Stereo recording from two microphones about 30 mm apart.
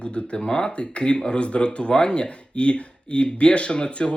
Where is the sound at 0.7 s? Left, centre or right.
Left.